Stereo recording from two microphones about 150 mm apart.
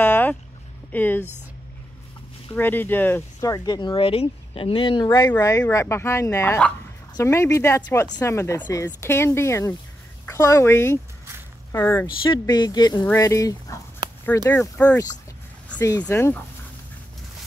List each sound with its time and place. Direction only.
0.0 s boat: 10° left (ahead or behind)
0.9 s speech: 10° left (ahead or behind)
2.5 s speech: 15° left (ahead or behind)
3.3 s speech: 25° left (ahead or behind)
5.3 s speech: 15° left (ahead or behind)
12.3 s speech: 30° left (ahead or behind); by 15.0 s 10° left (ahead or behind)
15.8 s speech: 25° left (ahead or behind)